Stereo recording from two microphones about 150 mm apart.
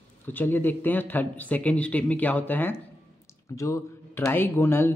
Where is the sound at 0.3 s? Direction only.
15° left (ahead or behind).